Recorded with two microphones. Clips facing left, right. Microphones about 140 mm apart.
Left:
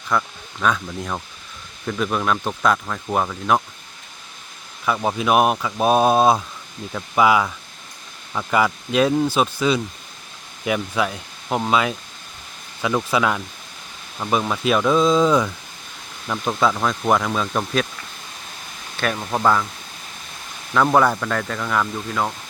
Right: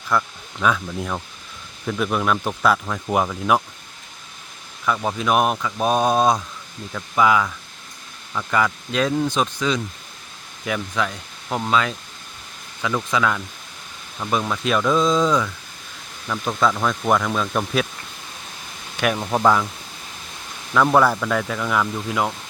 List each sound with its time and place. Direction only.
0.1 s speech: centre (ahead or behind)
4.9 s speech: 10° left (ahead or behind)
18.9 s speech: 10° right (ahead or behind)
20.7 s speech: centre (ahead or behind)